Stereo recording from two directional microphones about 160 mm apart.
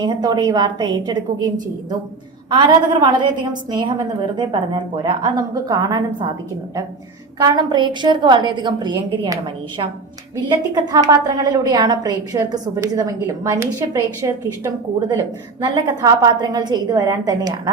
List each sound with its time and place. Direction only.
0.0 s a woman's voice: 25° right (ahead or behind)
7.3 s a woman's voice: 25° right (ahead or behind)
15.6 s a woman's voice: 25° right (ahead or behind)